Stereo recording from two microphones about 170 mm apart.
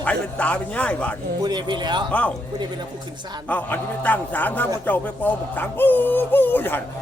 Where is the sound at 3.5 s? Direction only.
10° left (ahead or behind).